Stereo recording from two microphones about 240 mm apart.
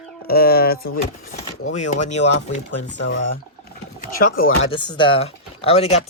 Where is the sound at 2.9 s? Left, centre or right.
Left.